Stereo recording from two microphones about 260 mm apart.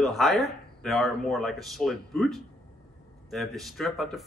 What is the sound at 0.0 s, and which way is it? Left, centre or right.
A man's voice, centre.